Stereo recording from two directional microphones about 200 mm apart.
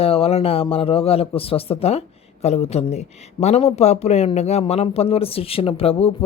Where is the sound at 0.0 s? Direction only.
30° left (ahead or behind).